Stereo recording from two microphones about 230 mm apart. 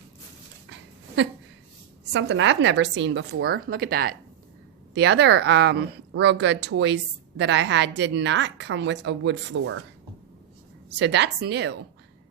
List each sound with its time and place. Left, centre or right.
0.7 s a sound: right
2.1 s a woman's voice: right
10.8 s a woman's voice: right